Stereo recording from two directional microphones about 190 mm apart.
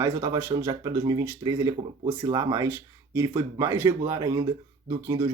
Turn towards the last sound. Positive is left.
turn(degrees=-20)  # may be behind; listen again after turning